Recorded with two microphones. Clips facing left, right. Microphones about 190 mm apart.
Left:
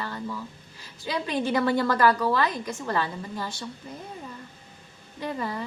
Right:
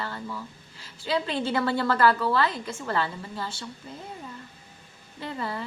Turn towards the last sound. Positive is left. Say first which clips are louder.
# left 2 dB
turn(degrees=15)  # may be behind; listen again after turning